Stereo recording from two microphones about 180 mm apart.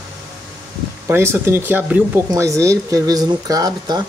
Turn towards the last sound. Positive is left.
turn(degrees=-20)  # may be behind; listen again after turning